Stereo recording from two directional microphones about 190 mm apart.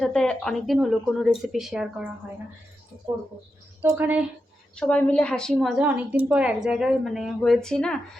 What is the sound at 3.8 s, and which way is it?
Speech, 10° right (ahead or behind).